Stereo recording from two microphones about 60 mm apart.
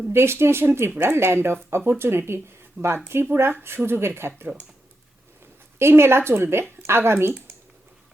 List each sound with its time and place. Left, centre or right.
0.1 s speech: right
5.8 s speech: right